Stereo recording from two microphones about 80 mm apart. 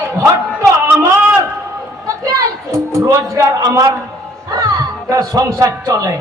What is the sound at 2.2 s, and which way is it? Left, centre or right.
Music, right.